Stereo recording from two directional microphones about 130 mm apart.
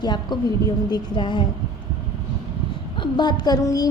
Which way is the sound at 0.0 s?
35° left (ahead or behind).